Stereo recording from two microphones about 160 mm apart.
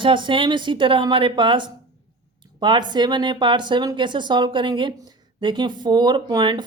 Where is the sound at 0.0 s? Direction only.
30° right (ahead or behind).